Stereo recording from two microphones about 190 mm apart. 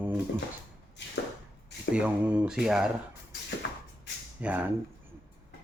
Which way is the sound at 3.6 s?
65° left (ahead or behind).